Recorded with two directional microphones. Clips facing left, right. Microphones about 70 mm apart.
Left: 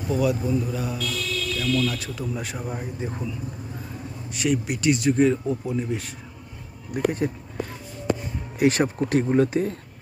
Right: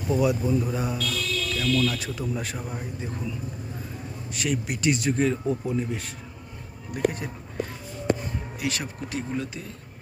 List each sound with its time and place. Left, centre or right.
0.1 s speech: centre
0.9 s speech: centre
4.3 s speech: centre
6.9 s speech: left
8.5 s speech: left